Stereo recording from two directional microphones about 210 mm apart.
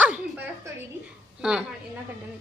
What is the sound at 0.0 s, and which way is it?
Music, 5° right (ahead or behind).